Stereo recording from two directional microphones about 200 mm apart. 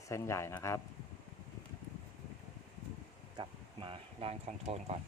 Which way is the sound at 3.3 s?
25° right (ahead or behind).